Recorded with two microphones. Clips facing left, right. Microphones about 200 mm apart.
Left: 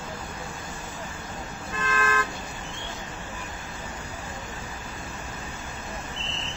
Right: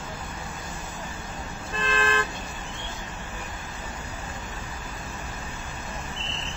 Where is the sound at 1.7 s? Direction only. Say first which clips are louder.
Right 1 dB; 30° right (ahead or behind).